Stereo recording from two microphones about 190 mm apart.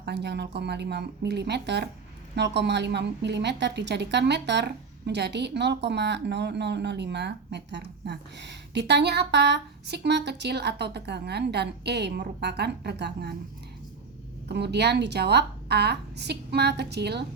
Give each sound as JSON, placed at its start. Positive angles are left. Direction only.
{"t": 0.0, "sound": "speech", "side_deg": -60}
{"t": 14.4, "sound": "speech", "side_deg": -60}